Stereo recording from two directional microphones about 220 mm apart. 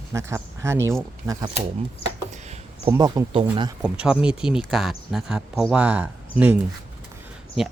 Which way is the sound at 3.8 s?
5° right (ahead or behind).